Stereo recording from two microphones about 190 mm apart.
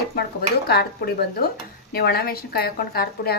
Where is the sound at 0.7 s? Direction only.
55° left (ahead or behind).